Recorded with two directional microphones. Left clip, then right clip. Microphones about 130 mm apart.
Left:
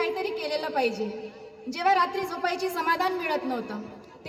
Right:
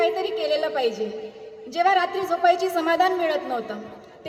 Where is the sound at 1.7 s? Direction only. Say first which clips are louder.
Right 3 dB; 15° right (ahead or behind).